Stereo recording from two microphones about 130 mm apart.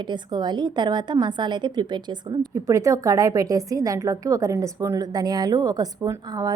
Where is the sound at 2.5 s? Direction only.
25° right (ahead or behind).